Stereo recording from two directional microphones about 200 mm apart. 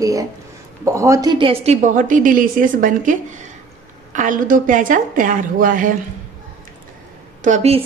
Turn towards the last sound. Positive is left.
turn(degrees=-35)  # may be behind; listen again after turning